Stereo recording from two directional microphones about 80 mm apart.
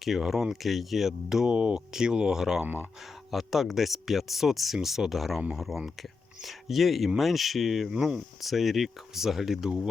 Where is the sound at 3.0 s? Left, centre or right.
Centre.